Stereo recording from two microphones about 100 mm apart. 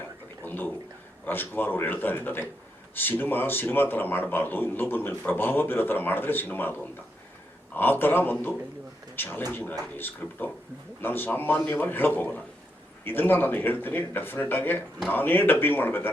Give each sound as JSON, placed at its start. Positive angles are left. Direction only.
{"t": 0.4, "sound": "a man's voice", "side_deg": 20}